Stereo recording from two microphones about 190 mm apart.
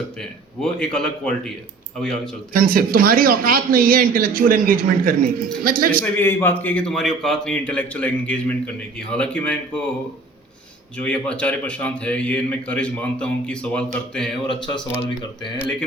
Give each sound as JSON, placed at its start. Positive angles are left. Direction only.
{"t": 0.2, "sound": "a man's voice", "side_deg": 5}
{"t": 2.5, "sound": "a man's voice", "side_deg": -50}
{"t": 6.0, "sound": "a man's voice", "side_deg": 10}
{"t": 10.9, "sound": "a man's voice", "side_deg": 5}